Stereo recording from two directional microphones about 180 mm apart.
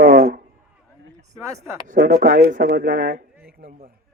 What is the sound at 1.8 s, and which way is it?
Speech, 55° right (ahead or behind).